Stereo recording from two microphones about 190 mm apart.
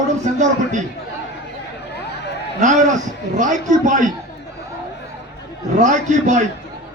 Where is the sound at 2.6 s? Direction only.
40° right (ahead or behind).